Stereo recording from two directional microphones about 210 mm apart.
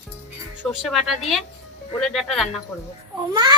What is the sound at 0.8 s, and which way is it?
Speech, centre (ahead or behind).